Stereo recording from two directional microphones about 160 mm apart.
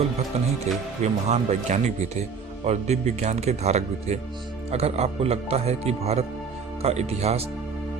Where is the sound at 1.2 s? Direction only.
45° right (ahead or behind).